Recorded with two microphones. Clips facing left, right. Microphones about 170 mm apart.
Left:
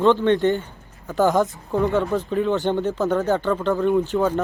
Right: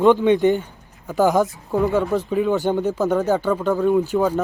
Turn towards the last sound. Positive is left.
turn(degrees=-10)  # may be behind; listen again after turning